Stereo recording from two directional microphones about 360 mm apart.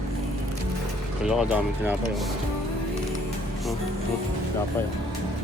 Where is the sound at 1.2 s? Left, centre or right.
Centre.